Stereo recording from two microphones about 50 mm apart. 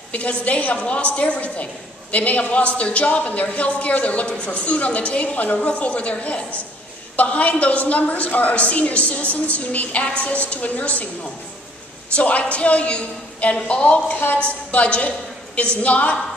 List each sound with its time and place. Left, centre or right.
0.1 s a woman's voice: left
12.2 s a woman's voice: left
14.7 s a woman's voice: left